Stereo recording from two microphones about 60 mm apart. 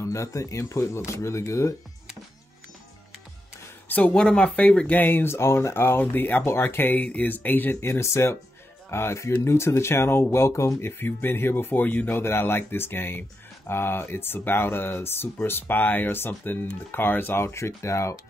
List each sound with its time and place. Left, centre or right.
0.0 s speech: left
4.1 s speech: centre
4.9 s speech: left
7.8 s speech: left
10.8 s speech: left
12.2 s speech: left
17.4 s speech: left